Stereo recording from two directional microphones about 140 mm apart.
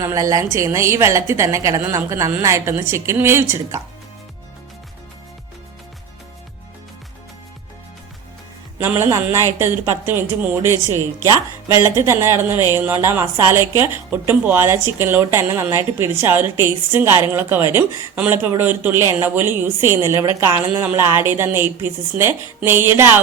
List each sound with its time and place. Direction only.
0.0 s a woman's voice: 25° right (ahead or behind)
8.8 s a woman's voice: 15° right (ahead or behind)
10.9 s a woman's voice: 25° left (ahead or behind)
11.7 s a woman's voice: 20° right (ahead or behind)